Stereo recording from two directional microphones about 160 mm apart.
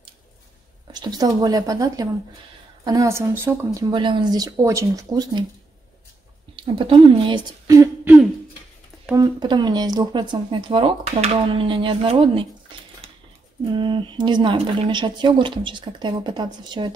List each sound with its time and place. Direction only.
0.9 s speech: 25° right (ahead or behind)
3.9 s speech: 30° right (ahead or behind)
6.6 s speech: 30° right (ahead or behind); by 8.3 s 10° right (ahead or behind)
9.1 s speech: 25° right (ahead or behind)
13.7 s speech: 30° right (ahead or behind)